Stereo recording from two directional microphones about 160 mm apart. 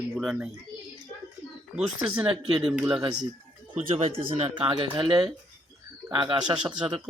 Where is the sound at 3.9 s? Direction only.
35° right (ahead or behind).